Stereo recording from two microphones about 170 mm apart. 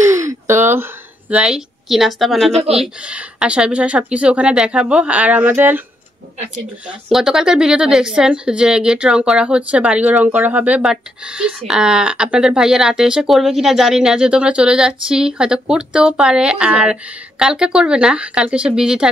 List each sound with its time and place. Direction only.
0.0 s a sound: 20° right (ahead or behind)
1.3 s speech: 5° right (ahead or behind)
6.9 s speech: 5° right (ahead or behind)